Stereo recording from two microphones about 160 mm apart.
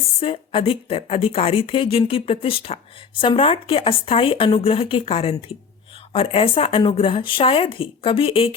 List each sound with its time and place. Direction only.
0.2 s speech: 35° left (ahead or behind)